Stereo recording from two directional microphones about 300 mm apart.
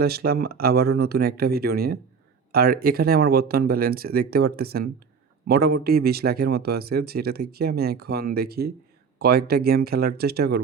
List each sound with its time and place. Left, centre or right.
0.0 s speech: right